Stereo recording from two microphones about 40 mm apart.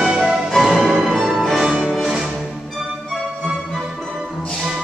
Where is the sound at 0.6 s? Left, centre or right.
Centre.